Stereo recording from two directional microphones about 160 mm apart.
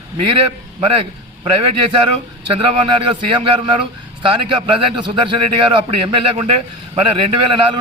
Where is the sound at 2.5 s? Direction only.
30° right (ahead or behind).